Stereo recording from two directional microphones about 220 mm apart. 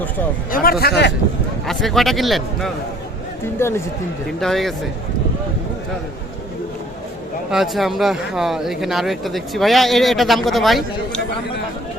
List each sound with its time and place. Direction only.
0.5 s a man's voice: 40° left (ahead or behind)
1.6 s speech: centre (ahead or behind)
3.6 s speech: 10° left (ahead or behind)
7.5 s speech: centre (ahead or behind)